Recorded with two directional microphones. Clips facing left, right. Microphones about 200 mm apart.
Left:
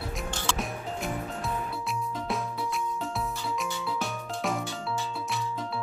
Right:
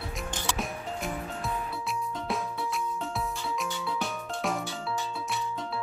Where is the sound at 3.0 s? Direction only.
Centre (ahead or behind).